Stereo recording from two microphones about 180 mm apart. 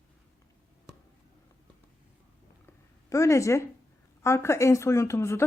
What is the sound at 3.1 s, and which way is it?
A woman's voice, 15° left (ahead or behind).